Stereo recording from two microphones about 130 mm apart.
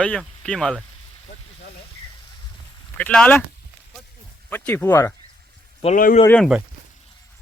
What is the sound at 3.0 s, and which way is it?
Speech, 10° left (ahead or behind).